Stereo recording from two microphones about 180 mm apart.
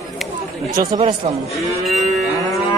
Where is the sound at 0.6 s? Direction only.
20° right (ahead or behind).